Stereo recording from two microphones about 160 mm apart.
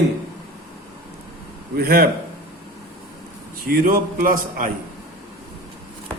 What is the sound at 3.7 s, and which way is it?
A man's voice, 65° right (ahead or behind).